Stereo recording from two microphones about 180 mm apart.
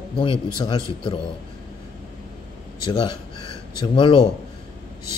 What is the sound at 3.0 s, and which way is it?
Speech, 25° left (ahead or behind).